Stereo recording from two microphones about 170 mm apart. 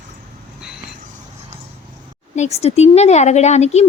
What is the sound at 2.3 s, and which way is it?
Speech, 40° left (ahead or behind).